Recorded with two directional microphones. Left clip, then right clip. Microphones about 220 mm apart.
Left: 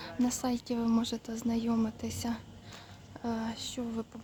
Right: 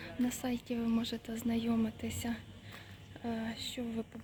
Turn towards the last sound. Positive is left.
turn(degrees=10)  # may be behind; listen again after turning